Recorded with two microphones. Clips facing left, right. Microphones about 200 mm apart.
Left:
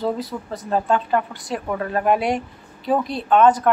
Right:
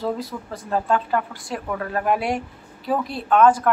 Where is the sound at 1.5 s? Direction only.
15° left (ahead or behind).